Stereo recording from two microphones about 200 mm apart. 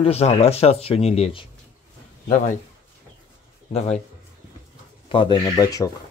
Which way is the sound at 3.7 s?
30° left (ahead or behind).